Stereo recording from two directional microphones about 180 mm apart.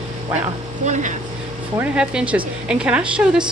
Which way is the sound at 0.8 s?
40° right (ahead or behind).